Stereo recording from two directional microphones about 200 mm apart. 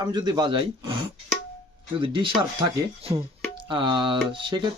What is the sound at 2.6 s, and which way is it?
Speech, 30° right (ahead or behind).